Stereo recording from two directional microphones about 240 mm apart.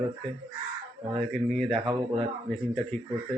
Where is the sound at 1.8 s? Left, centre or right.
Right.